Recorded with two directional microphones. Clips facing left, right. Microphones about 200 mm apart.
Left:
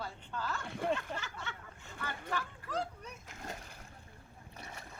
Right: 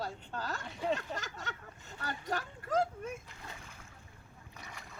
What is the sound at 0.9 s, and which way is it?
Speech, 40° right (ahead or behind).